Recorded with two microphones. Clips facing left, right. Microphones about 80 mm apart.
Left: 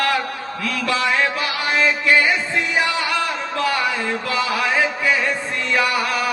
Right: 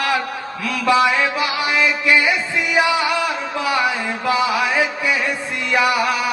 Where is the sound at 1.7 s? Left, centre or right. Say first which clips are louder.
Left 2 dB; left.